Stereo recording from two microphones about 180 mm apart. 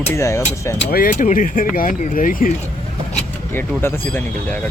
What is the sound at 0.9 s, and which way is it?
Speech, 50° left (ahead or behind).